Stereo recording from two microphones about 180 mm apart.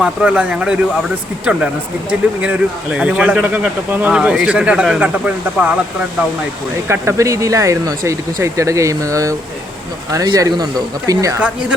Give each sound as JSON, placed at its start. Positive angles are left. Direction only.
{"t": 0.0, "sound": "speech", "side_deg": -5}
{"t": 6.8, "sound": "speech", "side_deg": -15}